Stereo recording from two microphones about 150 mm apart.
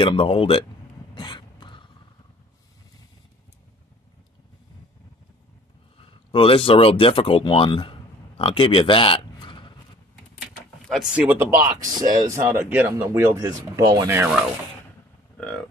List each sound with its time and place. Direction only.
0.0 s speech: 40° left (ahead or behind)
1.1 s a sound: 30° left (ahead or behind)
5.9 s speech: 35° left (ahead or behind)
10.4 s vehicle: 5° right (ahead or behind)
12.1 s speech: 25° right (ahead or behind)
15.3 s vehicle: 5° left (ahead or behind)